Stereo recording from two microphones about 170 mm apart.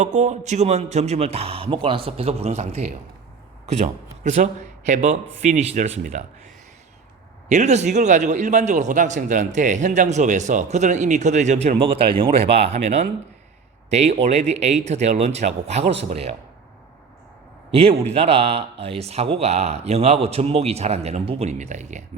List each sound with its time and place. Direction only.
0.0 s a man's voice: 45° right (ahead or behind)
7.4 s a man's voice: 45° right (ahead or behind)
17.7 s speech: 35° right (ahead or behind)